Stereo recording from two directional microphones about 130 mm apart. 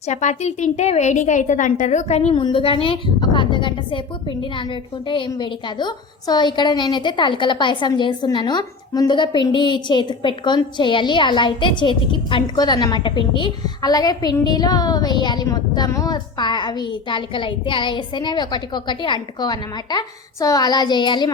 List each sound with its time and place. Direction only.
0.0 s a woman's voice: 65° left (ahead or behind); by 21.2 s 35° left (ahead or behind)